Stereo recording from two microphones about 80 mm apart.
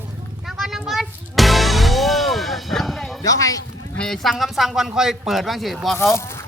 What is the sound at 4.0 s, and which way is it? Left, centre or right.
Speech, centre.